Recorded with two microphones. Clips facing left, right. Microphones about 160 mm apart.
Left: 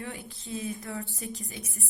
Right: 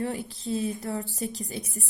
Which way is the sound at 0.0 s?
35° right (ahead or behind).